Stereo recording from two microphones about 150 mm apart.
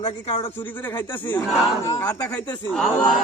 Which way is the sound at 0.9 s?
15° left (ahead or behind).